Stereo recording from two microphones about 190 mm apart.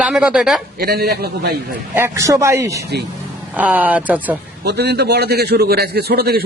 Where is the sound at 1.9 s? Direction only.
10° right (ahead or behind).